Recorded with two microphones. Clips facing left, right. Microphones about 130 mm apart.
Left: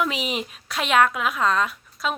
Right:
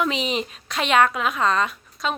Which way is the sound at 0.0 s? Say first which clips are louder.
Right 2 dB; 5° left (ahead or behind).